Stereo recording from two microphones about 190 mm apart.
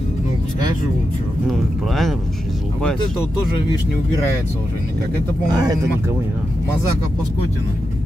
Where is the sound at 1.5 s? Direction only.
Centre (ahead or behind).